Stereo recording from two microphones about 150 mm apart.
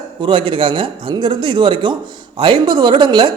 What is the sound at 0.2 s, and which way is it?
A woman's voice, 35° right (ahead or behind).